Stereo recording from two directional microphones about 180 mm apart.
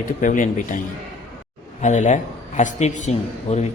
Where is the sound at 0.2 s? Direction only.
45° left (ahead or behind).